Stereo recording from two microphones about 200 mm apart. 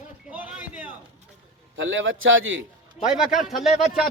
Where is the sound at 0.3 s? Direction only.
5° right (ahead or behind).